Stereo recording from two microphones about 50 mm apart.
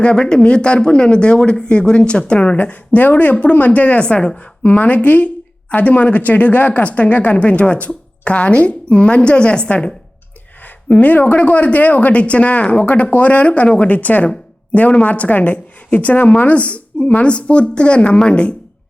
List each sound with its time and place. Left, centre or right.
0.0 s a woman's voice: centre
4.6 s a woman's voice: left